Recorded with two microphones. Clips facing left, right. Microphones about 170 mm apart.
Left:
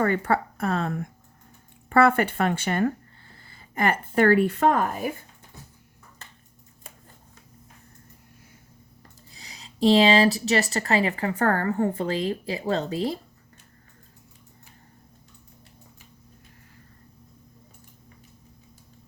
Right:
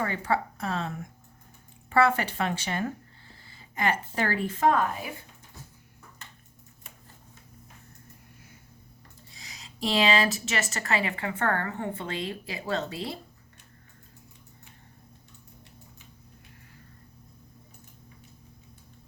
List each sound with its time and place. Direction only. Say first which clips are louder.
0.0 s speech: left 5 dB; 55° left (ahead or behind)
9.3 s speech: left 2 dB; 35° left (ahead or behind)